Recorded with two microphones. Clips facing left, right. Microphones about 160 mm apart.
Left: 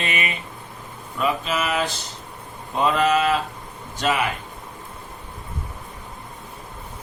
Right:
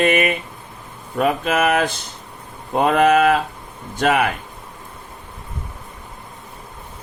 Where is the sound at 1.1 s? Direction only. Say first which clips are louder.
Right 5 dB; 55° right (ahead or behind).